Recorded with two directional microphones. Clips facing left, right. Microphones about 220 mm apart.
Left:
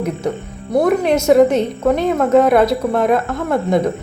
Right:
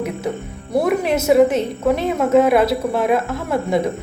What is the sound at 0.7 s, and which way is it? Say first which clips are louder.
Speech: left 3 dB; 5° right (ahead or behind).